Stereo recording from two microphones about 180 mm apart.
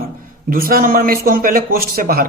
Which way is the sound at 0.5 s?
55° right (ahead or behind).